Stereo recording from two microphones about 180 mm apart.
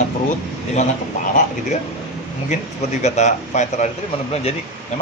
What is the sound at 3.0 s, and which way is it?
Speech, 40° left (ahead or behind).